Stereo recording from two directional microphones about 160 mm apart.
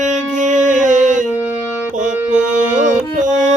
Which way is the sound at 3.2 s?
50° right (ahead or behind).